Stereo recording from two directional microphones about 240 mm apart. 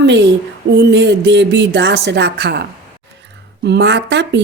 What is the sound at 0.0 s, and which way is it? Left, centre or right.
A woman's voice, right.